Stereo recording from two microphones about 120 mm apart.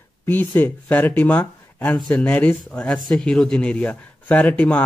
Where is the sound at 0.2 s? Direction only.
15° left (ahead or behind).